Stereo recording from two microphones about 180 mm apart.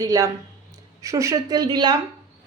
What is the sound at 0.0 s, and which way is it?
Speech, 20° right (ahead or behind).